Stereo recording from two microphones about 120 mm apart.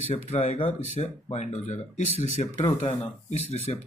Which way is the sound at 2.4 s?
60° left (ahead or behind).